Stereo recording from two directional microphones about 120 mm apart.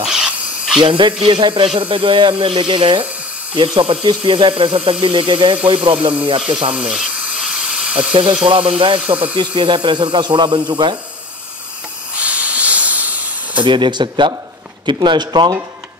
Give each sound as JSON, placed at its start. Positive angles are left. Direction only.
{"t": 0.0, "sound": "a sound", "side_deg": -5}
{"t": 0.7, "sound": "speech", "side_deg": -45}
{"t": 6.7, "sound": "hiss", "side_deg": -5}
{"t": 8.1, "sound": "speech", "side_deg": -45}
{"t": 12.2, "sound": "hiss", "side_deg": -10}
{"t": 13.6, "sound": "speech", "side_deg": -40}